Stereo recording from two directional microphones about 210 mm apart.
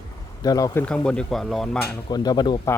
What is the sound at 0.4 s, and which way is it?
Speech, 15° left (ahead or behind).